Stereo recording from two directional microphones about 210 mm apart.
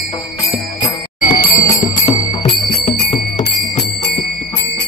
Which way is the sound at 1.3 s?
45° left (ahead or behind).